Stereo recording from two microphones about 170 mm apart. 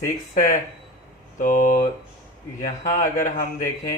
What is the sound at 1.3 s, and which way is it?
Speech, 50° left (ahead or behind).